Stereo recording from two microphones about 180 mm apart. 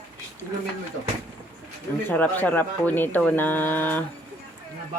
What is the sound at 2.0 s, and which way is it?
Speech, 10° left (ahead or behind).